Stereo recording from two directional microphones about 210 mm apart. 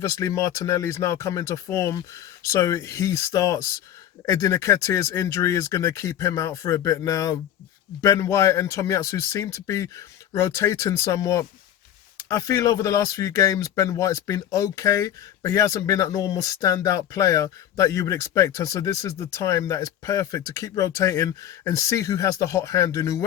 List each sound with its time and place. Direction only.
0.0 s speech: 15° left (ahead or behind)